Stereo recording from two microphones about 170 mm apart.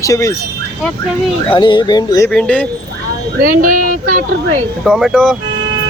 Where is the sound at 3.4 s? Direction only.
55° right (ahead or behind).